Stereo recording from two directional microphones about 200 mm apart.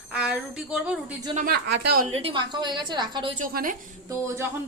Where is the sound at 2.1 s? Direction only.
25° right (ahead or behind).